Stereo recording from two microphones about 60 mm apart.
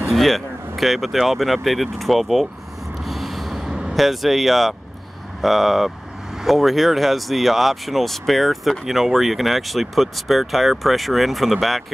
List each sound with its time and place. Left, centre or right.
0.1 s speech: centre
3.0 s vehicle: centre
3.9 s speech: centre